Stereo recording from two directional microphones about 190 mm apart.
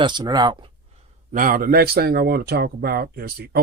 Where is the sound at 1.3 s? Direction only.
50° right (ahead or behind).